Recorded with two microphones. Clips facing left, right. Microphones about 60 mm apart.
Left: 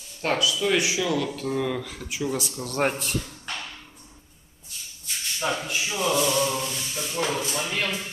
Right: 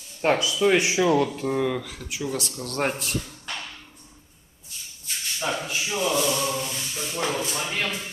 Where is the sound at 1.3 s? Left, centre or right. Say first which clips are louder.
Right 2 dB; centre.